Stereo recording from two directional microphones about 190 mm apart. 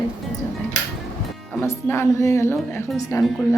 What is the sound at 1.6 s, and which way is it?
A woman's voice, 15° left (ahead or behind).